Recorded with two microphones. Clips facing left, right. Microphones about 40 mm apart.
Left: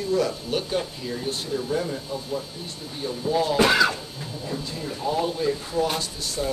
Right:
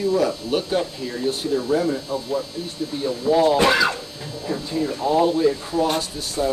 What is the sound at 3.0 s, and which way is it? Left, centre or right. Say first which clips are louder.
Speech: right 6 dB; right.